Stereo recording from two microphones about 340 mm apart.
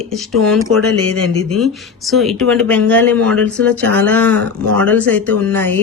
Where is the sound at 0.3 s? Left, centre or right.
Centre.